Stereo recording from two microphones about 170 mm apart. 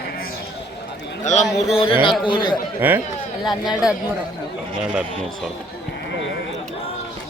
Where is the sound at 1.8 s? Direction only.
30° left (ahead or behind).